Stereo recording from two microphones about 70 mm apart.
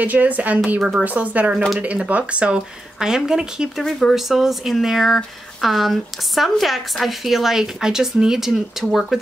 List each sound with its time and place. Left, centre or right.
0.0 s speech: right; by 9.2 s centre